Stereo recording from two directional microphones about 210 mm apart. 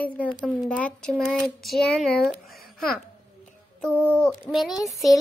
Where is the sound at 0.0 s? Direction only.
5° left (ahead or behind).